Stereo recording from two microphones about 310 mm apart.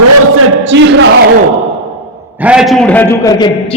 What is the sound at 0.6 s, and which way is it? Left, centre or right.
Speech, right.